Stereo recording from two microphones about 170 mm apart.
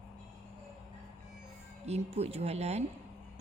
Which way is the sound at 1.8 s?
40° right (ahead or behind).